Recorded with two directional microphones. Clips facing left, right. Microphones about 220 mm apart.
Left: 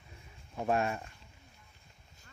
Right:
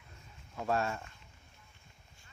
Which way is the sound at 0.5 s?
20° left (ahead or behind).